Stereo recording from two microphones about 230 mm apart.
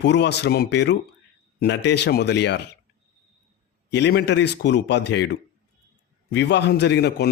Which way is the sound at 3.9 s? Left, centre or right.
Left.